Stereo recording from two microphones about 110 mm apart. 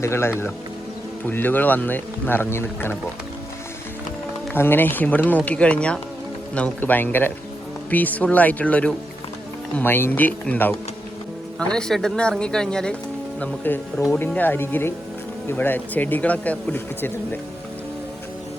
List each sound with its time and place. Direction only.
0.0 s speech: 25° left (ahead or behind)
4.5 s speech: 20° left (ahead or behind)